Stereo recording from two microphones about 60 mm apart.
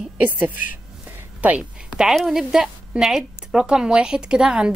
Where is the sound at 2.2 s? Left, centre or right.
Centre.